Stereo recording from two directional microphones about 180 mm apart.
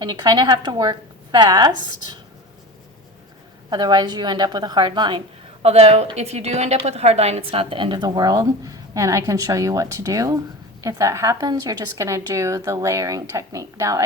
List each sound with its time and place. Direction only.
0.0 s a woman's voice: 25° right (ahead or behind)
3.7 s a woman's voice: 25° right (ahead or behind)